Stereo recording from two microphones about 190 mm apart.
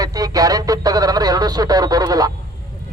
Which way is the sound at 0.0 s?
20° right (ahead or behind).